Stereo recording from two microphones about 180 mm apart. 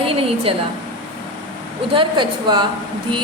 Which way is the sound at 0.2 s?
30° right (ahead or behind).